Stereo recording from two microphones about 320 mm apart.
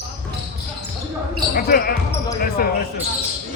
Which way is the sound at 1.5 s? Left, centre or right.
Left.